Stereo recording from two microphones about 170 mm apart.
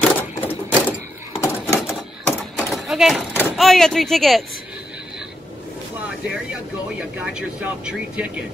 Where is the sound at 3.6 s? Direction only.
Centre (ahead or behind).